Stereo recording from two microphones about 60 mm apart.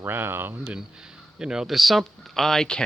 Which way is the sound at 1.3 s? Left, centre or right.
Centre.